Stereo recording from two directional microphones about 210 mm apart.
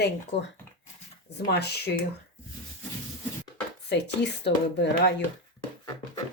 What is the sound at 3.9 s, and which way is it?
Speech, 55° left (ahead or behind).